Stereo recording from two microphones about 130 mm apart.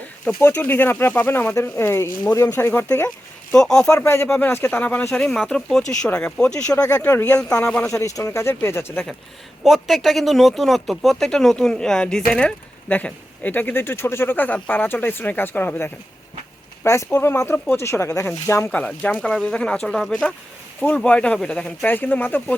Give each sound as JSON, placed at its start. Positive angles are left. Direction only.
{"t": 0.4, "sound": "speech", "side_deg": 15}
{"t": 3.5, "sound": "speech", "side_deg": 5}
{"t": 3.9, "sound": "speech", "side_deg": 20}
{"t": 7.9, "sound": "speech", "side_deg": 25}
{"t": 9.6, "sound": "speech", "side_deg": 0}
{"t": 20.8, "sound": "speech", "side_deg": 10}